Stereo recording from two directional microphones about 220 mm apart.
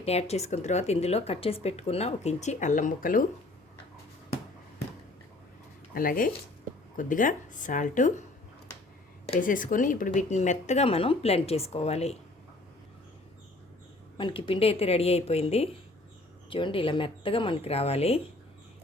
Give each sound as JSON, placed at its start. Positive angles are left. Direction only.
{"t": 0.0, "sound": "speech", "side_deg": 30}
{"t": 5.9, "sound": "speech", "side_deg": 40}
{"t": 9.2, "sound": "speech", "side_deg": 35}
{"t": 14.2, "sound": "speech", "side_deg": 25}